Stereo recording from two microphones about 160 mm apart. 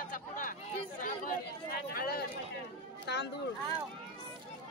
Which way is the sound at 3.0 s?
90° left.